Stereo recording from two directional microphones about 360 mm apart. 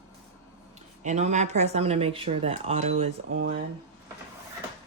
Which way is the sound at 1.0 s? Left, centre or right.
Centre.